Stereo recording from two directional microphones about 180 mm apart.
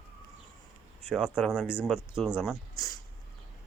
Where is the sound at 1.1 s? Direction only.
Centre (ahead or behind).